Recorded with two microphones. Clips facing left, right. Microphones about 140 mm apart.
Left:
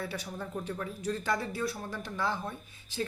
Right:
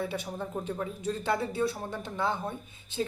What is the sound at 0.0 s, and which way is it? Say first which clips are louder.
Speech: right 4 dB; 25° right (ahead or behind).